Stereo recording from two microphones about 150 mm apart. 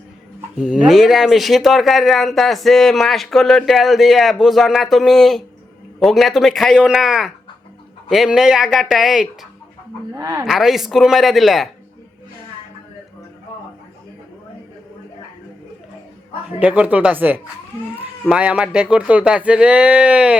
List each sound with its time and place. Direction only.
0.6 s speech: 5° right (ahead or behind)
10.2 s a woman's voice: 20° right (ahead or behind)
10.4 s speech: centre (ahead or behind)
16.5 s speech: 10° right (ahead or behind)